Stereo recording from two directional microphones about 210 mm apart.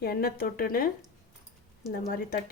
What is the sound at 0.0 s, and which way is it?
Speech, 45° left (ahead or behind).